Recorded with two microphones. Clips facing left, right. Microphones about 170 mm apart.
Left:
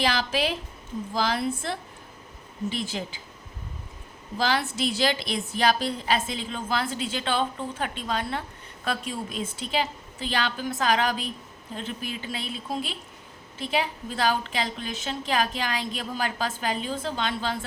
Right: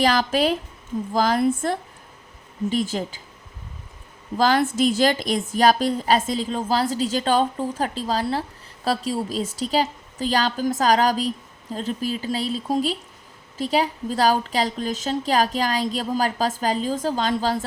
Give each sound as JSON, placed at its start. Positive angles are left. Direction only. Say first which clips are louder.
{"t": 0.0, "sound": "a woman's voice", "louder": "right 6 dB", "side_deg": -45}
{"t": 4.4, "sound": "a woman's voice", "louder": "right 7 dB", "side_deg": -45}